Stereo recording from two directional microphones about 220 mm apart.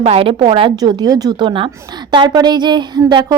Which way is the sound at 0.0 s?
25° right (ahead or behind).